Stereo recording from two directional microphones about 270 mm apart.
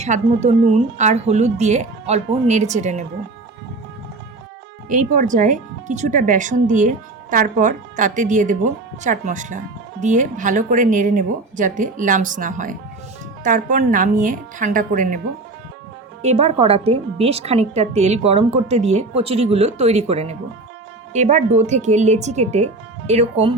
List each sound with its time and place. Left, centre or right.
0.0 s speech: right
4.9 s speech: right
16.2 s speech: right